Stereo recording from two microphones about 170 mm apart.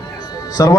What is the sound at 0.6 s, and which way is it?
Speech, 20° left (ahead or behind).